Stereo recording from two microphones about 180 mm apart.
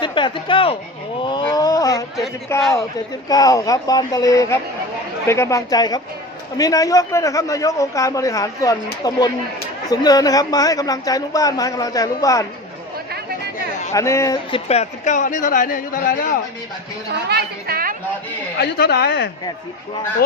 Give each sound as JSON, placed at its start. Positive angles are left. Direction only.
{"t": 0.0, "sound": "speech", "side_deg": 25}
{"t": 1.2, "sound": "roaring cats", "side_deg": 25}
{"t": 2.5, "sound": "a woman's voice", "side_deg": 15}
{"t": 13.9, "sound": "a woman's voice", "side_deg": 15}
{"t": 14.5, "sound": "a man's voice", "side_deg": 35}
{"t": 17.2, "sound": "a woman's voice", "side_deg": -60}
{"t": 18.6, "sound": "speech", "side_deg": 65}